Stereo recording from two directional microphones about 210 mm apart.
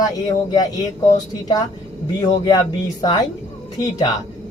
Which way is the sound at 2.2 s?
20° left (ahead or behind).